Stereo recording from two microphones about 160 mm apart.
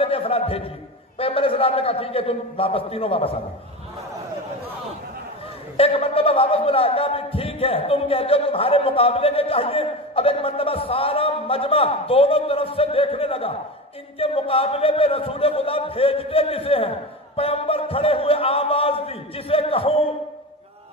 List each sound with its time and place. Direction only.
0.0 s a sound: 35° left (ahead or behind)
1.1 s speech: 35° left (ahead or behind)
5.8 s speech: 35° left (ahead or behind)